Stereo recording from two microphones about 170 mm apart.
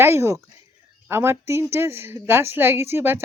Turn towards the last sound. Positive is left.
turn(degrees=-15)  # may be behind; listen again after turning